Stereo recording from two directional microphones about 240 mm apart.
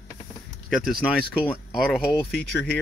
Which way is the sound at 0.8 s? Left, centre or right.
Centre.